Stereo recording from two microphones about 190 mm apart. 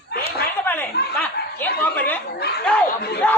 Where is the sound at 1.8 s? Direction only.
10° left (ahead or behind).